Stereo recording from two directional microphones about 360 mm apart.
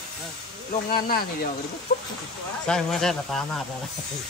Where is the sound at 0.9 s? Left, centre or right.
Left.